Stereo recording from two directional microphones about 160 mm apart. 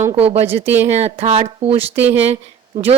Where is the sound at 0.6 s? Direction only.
15° right (ahead or behind).